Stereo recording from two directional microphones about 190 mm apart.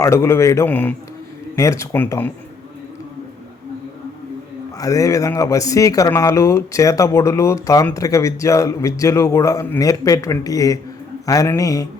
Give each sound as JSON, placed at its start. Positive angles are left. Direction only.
{"t": 0.0, "sound": "speech", "side_deg": 15}
{"t": 4.8, "sound": "speech", "side_deg": 15}